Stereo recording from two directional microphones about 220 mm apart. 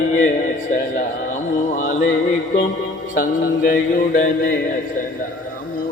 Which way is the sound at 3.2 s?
40° left (ahead or behind).